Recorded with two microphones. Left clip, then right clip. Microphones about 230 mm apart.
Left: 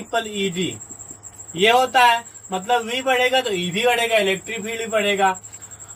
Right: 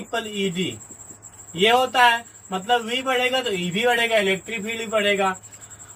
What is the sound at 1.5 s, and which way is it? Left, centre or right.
A man's voice, centre.